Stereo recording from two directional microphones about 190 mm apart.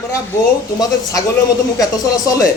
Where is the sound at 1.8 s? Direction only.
20° left (ahead or behind).